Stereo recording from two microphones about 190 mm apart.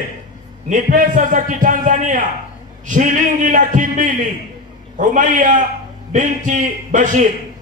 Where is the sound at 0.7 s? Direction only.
45° right (ahead or behind).